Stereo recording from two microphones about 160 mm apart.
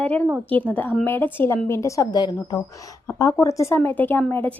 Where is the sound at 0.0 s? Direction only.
10° left (ahead or behind).